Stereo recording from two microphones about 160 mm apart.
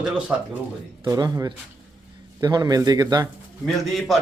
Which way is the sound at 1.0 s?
25° right (ahead or behind).